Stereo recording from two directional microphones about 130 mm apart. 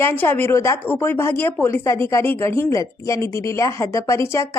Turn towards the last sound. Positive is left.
turn(degrees=20)  # may be behind; listen again after turning